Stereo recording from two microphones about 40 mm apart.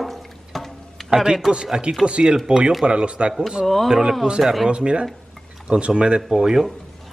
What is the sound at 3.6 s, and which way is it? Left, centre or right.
Speech, centre.